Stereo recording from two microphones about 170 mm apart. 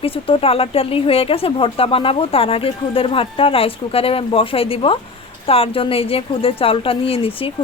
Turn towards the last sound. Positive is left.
turn(degrees=35)  # may be behind; listen again after turning